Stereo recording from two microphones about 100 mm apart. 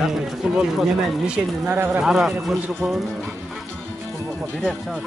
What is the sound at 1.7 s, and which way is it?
Speech, 15° right (ahead or behind).